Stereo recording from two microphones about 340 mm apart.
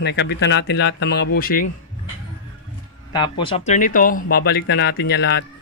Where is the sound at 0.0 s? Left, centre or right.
Left.